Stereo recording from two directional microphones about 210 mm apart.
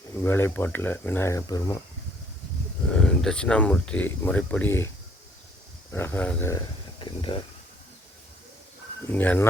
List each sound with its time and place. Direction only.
0.2 s speech: 10° left (ahead or behind)
2.9 s speech: 5° left (ahead or behind)
5.9 s speech: 10° left (ahead or behind)
7.0 s a sound: 25° left (ahead or behind)
9.0 s speech: 10° left (ahead or behind)